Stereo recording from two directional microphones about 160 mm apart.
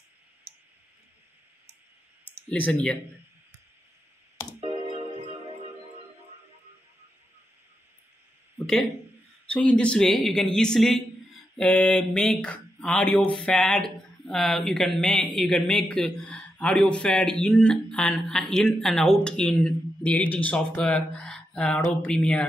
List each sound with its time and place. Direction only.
2.5 s speech: 10° left (ahead or behind)
4.6 s music: 40° right (ahead or behind)
9.5 s speech: 5° left (ahead or behind)